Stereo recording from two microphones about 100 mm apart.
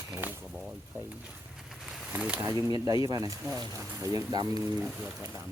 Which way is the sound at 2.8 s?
35° right (ahead or behind).